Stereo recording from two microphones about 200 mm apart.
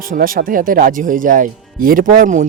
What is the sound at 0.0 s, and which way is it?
Speech, 45° right (ahead or behind).